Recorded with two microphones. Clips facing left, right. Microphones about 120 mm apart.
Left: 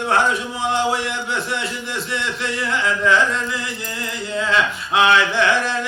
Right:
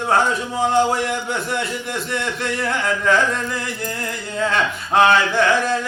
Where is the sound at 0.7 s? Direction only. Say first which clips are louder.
Right 2 dB; 50° right (ahead or behind).